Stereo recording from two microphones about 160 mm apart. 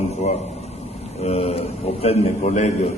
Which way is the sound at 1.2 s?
40° left (ahead or behind).